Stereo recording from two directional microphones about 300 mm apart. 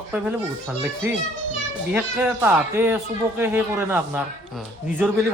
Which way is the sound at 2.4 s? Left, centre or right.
Centre.